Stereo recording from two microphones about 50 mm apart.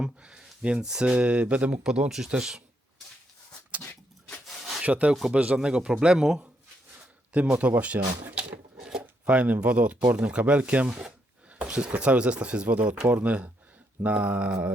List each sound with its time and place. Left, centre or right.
0.0 s a sound: centre
0.6 s speech: centre
1.8 s speech: centre
4.4 s rub: centre
4.8 s speech: right; by 6.4 s centre
7.3 s speech: right
7.9 s speech: right
8.4 s a sound: right
8.9 s speech: centre